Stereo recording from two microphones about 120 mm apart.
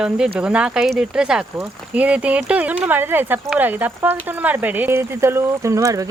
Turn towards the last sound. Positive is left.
turn(degrees=-25)  # may be behind; listen again after turning